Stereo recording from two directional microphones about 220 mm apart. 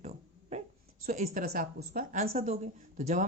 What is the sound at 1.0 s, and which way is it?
Speech, 35° right (ahead or behind).